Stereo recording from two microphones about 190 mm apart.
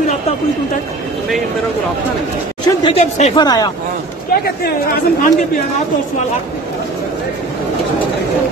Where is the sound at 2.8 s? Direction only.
30° left (ahead or behind).